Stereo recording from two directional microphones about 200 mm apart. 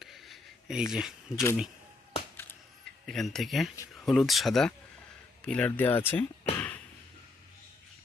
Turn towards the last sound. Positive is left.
turn(degrees=10)  # may be behind; listen again after turning